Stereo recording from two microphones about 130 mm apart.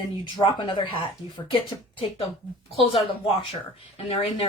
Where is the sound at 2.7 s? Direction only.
45° left (ahead or behind).